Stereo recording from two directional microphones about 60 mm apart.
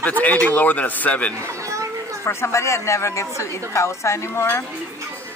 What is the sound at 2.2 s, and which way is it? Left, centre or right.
A woman's voice, left.